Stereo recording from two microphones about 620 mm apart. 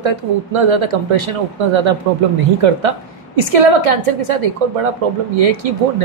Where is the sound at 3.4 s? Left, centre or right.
Right.